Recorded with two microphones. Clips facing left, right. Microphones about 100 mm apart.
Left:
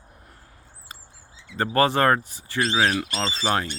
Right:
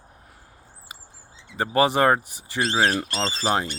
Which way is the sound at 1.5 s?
15° right (ahead or behind).